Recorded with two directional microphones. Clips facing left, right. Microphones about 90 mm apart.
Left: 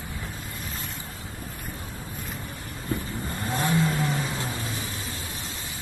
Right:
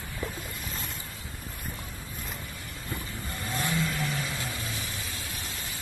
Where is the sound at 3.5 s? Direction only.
35° left (ahead or behind).